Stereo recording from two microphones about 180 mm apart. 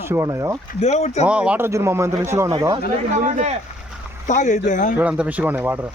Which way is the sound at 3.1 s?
45° right (ahead or behind).